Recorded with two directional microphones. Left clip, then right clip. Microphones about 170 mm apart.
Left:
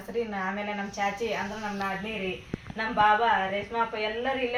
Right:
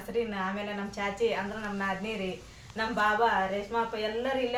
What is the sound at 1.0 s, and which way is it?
Speech, 15° right (ahead or behind).